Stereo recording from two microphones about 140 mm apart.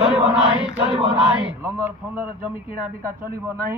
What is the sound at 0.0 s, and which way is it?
Choir, 5° right (ahead or behind).